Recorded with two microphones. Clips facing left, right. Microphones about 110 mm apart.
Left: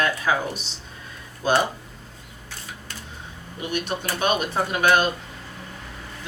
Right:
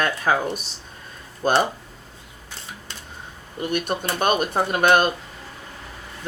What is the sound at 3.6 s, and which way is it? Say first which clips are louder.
Speech: right 3 dB; 50° right (ahead or behind).